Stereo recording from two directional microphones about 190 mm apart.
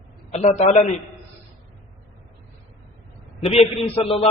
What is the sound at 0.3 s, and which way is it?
Speech, 35° left (ahead or behind).